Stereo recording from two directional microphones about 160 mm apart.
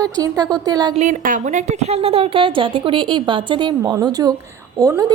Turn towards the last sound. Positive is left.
turn(degrees=-20)  # may be behind; listen again after turning